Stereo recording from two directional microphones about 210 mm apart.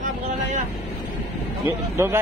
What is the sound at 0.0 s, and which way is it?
Vehicle, 35° right (ahead or behind).